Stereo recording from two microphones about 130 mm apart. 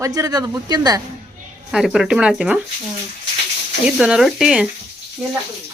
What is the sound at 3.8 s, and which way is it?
Speech, 5° right (ahead or behind).